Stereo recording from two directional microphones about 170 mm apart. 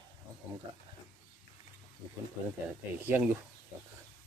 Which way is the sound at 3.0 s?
10° right (ahead or behind).